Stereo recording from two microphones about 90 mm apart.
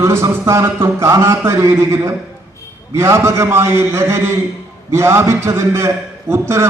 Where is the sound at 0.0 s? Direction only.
30° right (ahead or behind).